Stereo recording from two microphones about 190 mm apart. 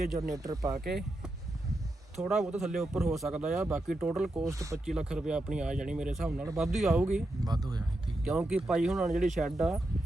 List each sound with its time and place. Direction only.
0.2 s speech: 20° right (ahead or behind)
2.2 s speech: centre (ahead or behind)
4.4 s speech: 15° right (ahead or behind)
4.9 s speech: 5° right (ahead or behind)
7.4 s speech: 20° right (ahead or behind)
8.2 s speech: 5° right (ahead or behind)